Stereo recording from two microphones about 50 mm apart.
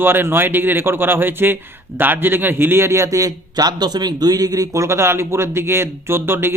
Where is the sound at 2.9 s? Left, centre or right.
Right.